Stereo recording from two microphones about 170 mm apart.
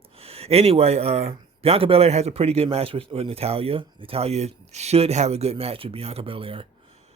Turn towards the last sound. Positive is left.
turn(degrees=-30)  # may be behind; listen again after turning